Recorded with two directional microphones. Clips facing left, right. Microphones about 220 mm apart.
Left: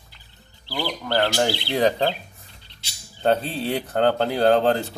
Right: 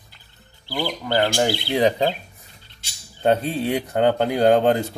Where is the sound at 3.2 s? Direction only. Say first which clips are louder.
Right 2 dB; 10° right (ahead or behind).